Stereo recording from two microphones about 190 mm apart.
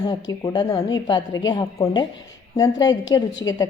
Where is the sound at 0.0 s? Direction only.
20° left (ahead or behind).